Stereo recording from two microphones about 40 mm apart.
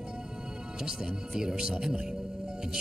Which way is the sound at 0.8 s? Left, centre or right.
Centre.